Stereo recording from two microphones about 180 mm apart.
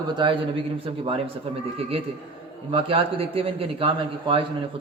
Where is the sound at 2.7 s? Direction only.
30° right (ahead or behind).